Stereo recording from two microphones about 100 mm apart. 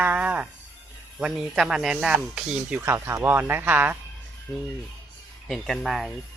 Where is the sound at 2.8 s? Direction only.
25° right (ahead or behind).